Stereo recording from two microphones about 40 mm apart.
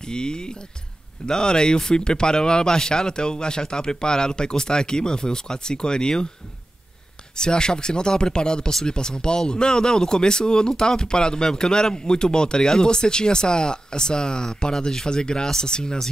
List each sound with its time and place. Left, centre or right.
0.0 s speech: centre
7.3 s speech: centre